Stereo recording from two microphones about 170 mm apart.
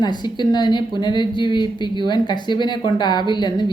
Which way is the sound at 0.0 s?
25° left (ahead or behind).